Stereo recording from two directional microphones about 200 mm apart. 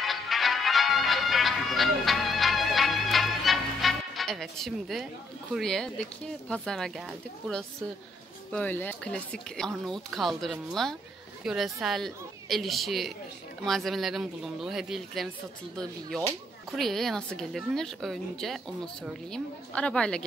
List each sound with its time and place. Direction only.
0.0 s music: centre (ahead or behind)
5.5 s speech: 5° left (ahead or behind)
16.7 s speech: centre (ahead or behind)